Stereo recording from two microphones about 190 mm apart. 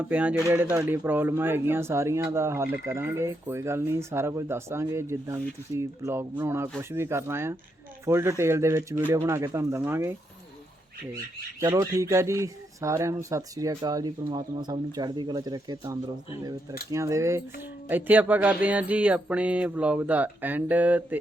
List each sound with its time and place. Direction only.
0.0 s speech: 5° right (ahead or behind)
11.6 s speech: 20° right (ahead or behind)